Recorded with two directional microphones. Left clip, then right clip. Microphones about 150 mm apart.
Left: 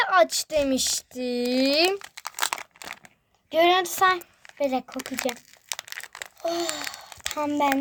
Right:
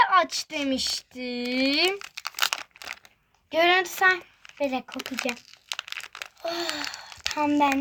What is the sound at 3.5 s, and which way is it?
Speech, 25° left (ahead or behind).